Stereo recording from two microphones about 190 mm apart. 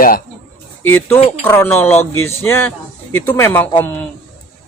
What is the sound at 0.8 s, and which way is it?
A man's voice, 10° left (ahead or behind).